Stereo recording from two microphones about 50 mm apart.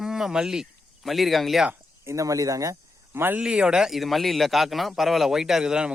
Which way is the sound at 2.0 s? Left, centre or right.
Right.